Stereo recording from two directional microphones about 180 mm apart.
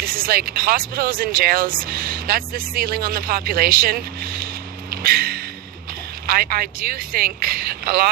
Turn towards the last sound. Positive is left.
turn(degrees=-55)  # may be behind; listen again after turning